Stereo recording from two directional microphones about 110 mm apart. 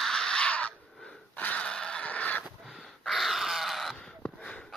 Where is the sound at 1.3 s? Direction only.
15° left (ahead or behind).